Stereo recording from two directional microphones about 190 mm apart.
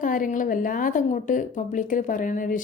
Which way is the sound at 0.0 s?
45° left (ahead or behind).